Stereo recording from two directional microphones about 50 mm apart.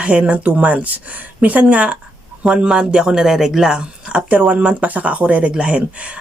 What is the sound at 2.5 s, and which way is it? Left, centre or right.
Speech, centre.